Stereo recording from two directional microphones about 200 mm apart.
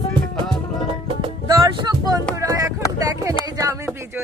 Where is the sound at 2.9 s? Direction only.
15° right (ahead or behind).